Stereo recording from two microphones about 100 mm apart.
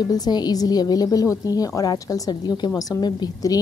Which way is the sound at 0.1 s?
40° left (ahead or behind).